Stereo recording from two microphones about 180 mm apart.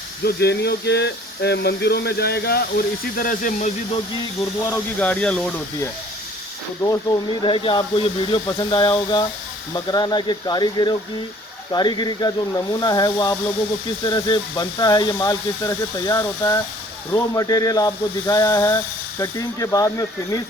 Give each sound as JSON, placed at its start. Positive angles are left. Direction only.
{"t": 0.3, "sound": "speech", "side_deg": 65}
{"t": 4.7, "sound": "speech", "side_deg": 5}
{"t": 6.8, "sound": "speech", "side_deg": 20}